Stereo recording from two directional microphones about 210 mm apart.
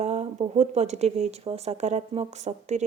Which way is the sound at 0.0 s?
35° right (ahead or behind).